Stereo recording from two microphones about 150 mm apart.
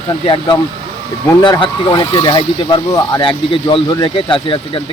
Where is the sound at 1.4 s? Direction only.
30° left (ahead or behind).